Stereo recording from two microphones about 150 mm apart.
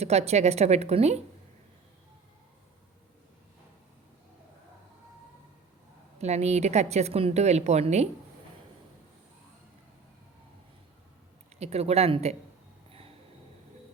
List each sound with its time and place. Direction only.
0.0 s a woman's voice: 45° right (ahead or behind)
6.1 s a woman's voice: 45° right (ahead or behind)
11.6 s a woman's voice: 45° right (ahead or behind)